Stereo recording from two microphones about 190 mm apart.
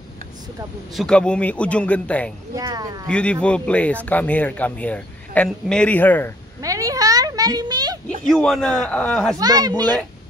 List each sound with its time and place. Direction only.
0.9 s a man's voice: 5° left (ahead or behind)
2.5 s speech: 20° right (ahead or behind)
3.1 s speech: 5° left (ahead or behind)
6.6 s a sound: 15° right (ahead or behind)
8.3 s a man's voice: centre (ahead or behind)
9.4 s speech: 20° right (ahead or behind)